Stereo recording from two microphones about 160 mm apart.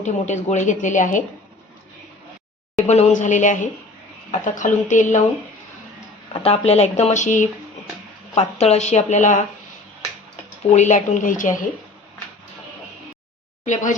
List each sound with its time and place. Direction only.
0.0 s a woman's voice: 45° left (ahead or behind)
2.8 s a woman's voice: 45° left (ahead or behind)
6.3 s a woman's voice: 40° left (ahead or behind)
10.6 s a woman's voice: 45° left (ahead or behind)